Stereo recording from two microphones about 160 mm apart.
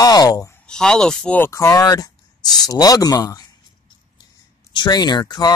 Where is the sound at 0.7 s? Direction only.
5° left (ahead or behind); by 3.5 s 25° left (ahead or behind).